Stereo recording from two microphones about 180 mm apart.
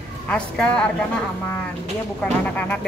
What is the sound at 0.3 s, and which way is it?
Speech, 5° left (ahead or behind).